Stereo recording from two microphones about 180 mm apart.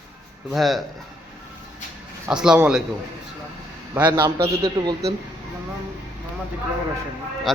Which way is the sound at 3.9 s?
10° right (ahead or behind).